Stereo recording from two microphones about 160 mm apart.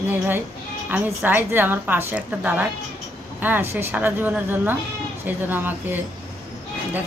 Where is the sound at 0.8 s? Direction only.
10° right (ahead or behind).